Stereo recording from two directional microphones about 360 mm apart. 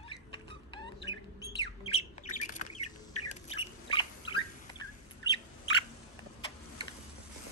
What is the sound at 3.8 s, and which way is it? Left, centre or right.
Turkey, centre.